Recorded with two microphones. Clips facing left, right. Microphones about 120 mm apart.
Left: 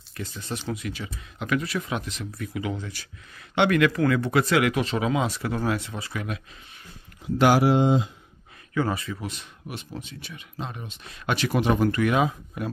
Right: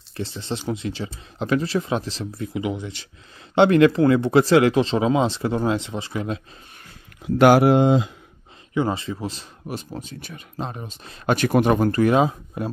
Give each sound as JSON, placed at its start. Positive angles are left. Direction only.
{"t": 0.2, "sound": "speech", "side_deg": -30}
{"t": 3.5, "sound": "speech", "side_deg": -30}
{"t": 7.3, "sound": "speech", "side_deg": -55}
{"t": 8.7, "sound": "speech", "side_deg": -25}